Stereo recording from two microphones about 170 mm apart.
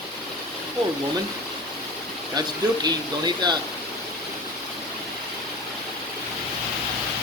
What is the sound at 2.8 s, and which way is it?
Speech, 25° right (ahead or behind).